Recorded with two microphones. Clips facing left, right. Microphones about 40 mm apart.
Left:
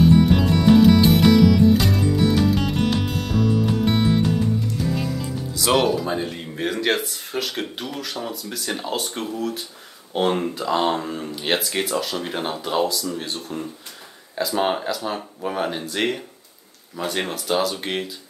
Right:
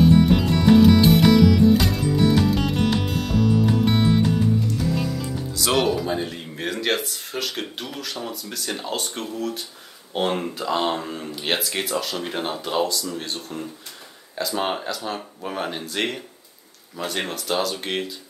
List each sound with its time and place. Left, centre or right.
0.0 s music: centre
10.1 s speech: centre